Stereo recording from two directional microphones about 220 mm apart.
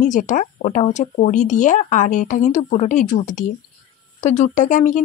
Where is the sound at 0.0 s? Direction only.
35° left (ahead or behind).